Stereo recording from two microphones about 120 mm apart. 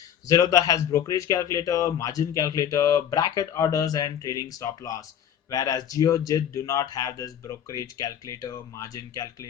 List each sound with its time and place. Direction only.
0.3 s speech: 30° left (ahead or behind)